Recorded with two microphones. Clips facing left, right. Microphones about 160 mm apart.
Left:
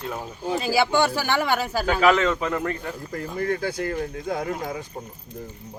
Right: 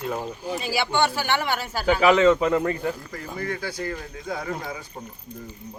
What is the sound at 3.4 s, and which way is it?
Speech, 45° left (ahead or behind).